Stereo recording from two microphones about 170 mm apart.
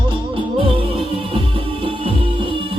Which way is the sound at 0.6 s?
30° right (ahead or behind).